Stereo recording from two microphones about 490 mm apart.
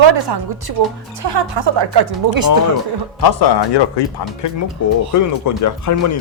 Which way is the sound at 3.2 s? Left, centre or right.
Left.